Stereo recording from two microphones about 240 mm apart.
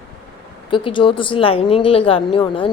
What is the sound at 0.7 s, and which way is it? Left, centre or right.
A woman's voice, centre.